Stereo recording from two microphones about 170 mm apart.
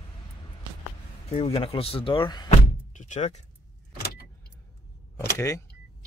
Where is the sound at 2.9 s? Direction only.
45° left (ahead or behind).